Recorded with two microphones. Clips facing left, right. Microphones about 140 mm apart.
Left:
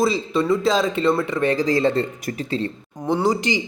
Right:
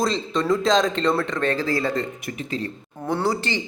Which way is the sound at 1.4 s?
15° left (ahead or behind).